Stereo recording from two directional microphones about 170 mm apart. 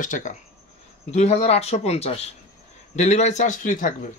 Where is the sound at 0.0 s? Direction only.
50° left (ahead or behind).